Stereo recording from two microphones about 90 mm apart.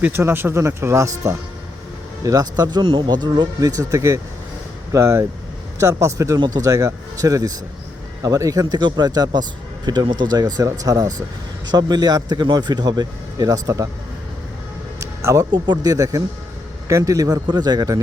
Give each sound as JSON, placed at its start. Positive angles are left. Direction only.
{"t": 0.0, "sound": "a man's voice", "side_deg": -25}
{"t": 15.0, "sound": "a sound", "side_deg": -35}
{"t": 15.5, "sound": "a man's voice", "side_deg": -55}